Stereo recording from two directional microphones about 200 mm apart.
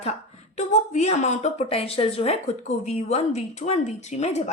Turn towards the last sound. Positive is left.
turn(degrees=35)  # may be behind; listen again after turning